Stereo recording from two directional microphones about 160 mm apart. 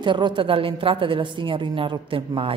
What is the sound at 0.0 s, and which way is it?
A woman's voice, 30° right (ahead or behind).